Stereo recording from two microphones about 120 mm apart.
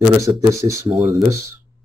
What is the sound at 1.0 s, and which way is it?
Speech, centre (ahead or behind).